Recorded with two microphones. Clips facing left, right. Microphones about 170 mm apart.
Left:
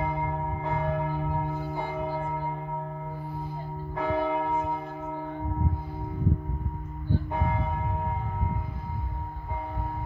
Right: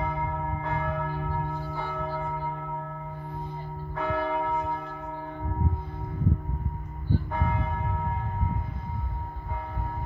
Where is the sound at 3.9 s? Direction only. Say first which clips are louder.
Left 1 dB; 20° left (ahead or behind).